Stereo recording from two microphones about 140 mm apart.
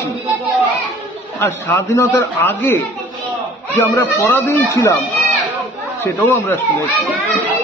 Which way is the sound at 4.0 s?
15° left (ahead or behind).